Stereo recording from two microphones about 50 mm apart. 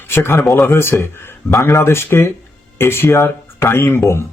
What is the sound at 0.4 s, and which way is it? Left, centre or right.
Speech, centre.